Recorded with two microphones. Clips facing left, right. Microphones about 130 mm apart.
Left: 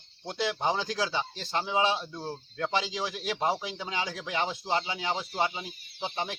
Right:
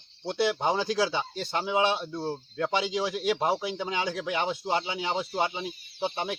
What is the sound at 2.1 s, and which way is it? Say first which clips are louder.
Speech: right 5 dB; 25° right (ahead or behind).